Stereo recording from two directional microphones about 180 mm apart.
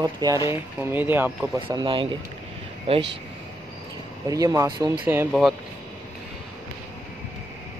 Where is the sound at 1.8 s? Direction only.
25° right (ahead or behind).